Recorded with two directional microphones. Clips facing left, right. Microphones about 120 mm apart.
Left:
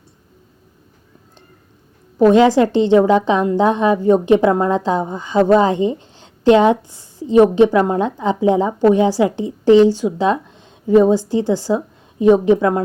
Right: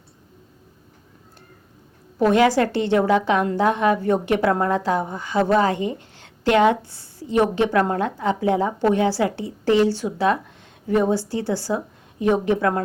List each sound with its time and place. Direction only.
2.1 s a woman's voice: 20° left (ahead or behind)